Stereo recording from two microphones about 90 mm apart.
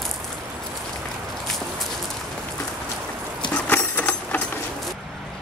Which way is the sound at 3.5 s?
20° left (ahead or behind).